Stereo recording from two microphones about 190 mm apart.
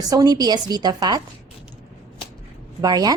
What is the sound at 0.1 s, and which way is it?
A woman's voice, 20° right (ahead or behind).